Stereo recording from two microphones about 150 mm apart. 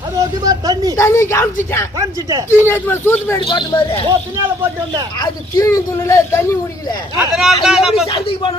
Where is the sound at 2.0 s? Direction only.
25° right (ahead or behind).